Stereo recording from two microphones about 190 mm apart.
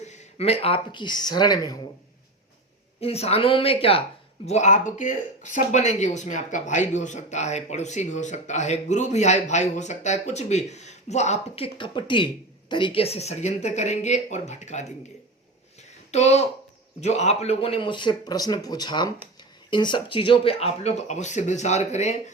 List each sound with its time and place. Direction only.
0.1 s speech: 35° left (ahead or behind)
3.0 s speech: 30° left (ahead or behind)
16.1 s speech: 35° left (ahead or behind)